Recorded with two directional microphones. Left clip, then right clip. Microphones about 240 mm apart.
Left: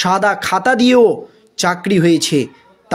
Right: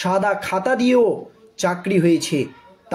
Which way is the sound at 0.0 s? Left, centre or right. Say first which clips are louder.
Left 5 dB; left.